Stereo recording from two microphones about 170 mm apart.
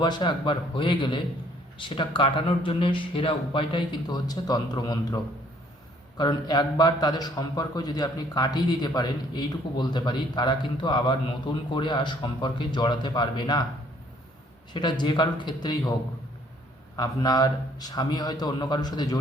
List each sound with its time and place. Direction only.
0.0 s a man's voice: 25° left (ahead or behind)
14.7 s a man's voice: 25° left (ahead or behind)
17.0 s a man's voice: 25° left (ahead or behind)